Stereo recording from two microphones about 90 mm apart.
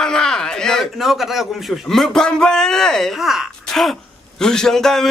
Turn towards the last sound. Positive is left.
turn(degrees=5)  # may be behind; listen again after turning